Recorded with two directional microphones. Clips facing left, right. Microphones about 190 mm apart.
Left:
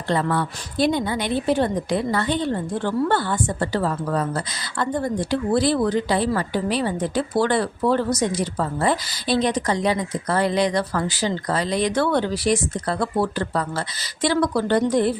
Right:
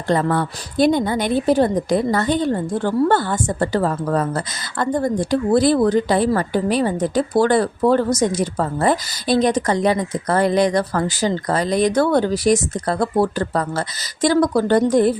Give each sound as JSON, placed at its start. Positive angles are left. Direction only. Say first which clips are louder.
{"t": 0.1, "sound": "a woman's voice", "louder": "right 4 dB", "side_deg": -45}